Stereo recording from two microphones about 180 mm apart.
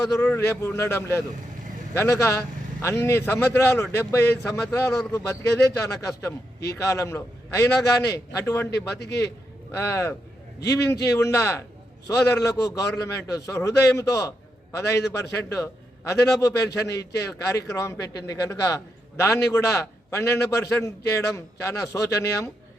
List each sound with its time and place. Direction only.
0.2 s a man's voice: 15° left (ahead or behind)
9.0 s a man's voice: 65° left (ahead or behind)
9.7 s a man's voice: 15° left (ahead or behind)